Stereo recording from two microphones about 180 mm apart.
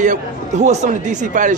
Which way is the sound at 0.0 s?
40° right (ahead or behind).